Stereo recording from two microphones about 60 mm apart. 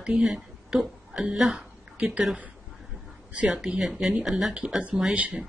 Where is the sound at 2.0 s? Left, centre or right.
Centre.